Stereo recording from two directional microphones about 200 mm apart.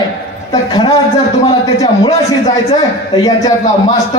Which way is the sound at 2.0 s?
30° left (ahead or behind).